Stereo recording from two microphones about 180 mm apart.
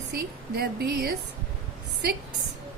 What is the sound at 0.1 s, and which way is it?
A woman's voice, 60° right (ahead or behind).